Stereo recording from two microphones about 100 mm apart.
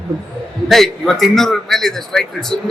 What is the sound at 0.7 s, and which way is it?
A man's voice, centre (ahead or behind).